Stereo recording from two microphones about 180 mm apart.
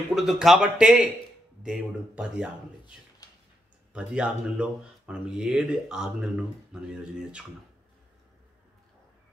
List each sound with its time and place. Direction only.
0.1 s speech: centre (ahead or behind)
3.2 s a sound: 20° left (ahead or behind)
3.9 s speech: 5° right (ahead or behind)